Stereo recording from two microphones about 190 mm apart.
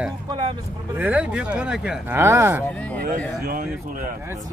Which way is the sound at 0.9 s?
10° right (ahead or behind).